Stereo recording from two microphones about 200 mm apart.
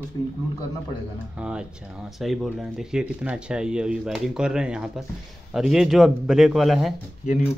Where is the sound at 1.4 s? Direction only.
5° right (ahead or behind).